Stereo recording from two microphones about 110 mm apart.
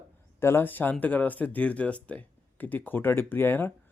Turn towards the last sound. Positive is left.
turn(degrees=20)  # may be behind; listen again after turning